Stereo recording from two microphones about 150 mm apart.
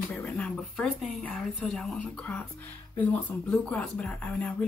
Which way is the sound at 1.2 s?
5° left (ahead or behind).